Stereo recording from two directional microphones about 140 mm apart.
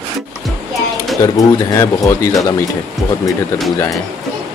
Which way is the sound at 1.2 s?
25° left (ahead or behind).